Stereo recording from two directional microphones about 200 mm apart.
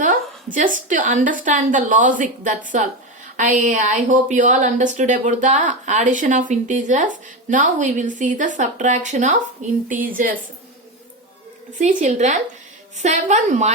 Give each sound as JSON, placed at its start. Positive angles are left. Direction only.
{"t": 0.0, "sound": "a woman's voice", "side_deg": -40}
{"t": 11.8, "sound": "a woman's voice", "side_deg": -35}